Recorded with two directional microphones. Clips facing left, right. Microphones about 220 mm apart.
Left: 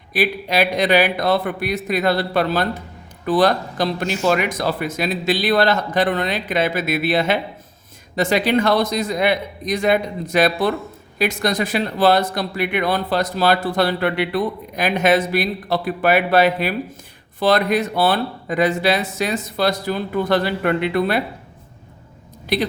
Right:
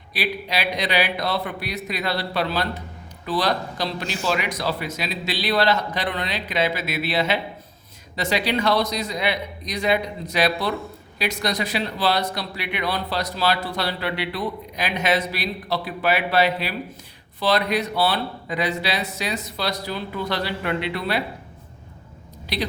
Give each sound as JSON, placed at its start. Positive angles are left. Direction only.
{"t": 0.1, "sound": "speech", "side_deg": 50}
{"t": 22.5, "sound": "speech", "side_deg": 50}